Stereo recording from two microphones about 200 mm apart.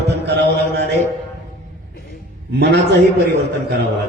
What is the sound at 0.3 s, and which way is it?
Mantra, 55° right (ahead or behind).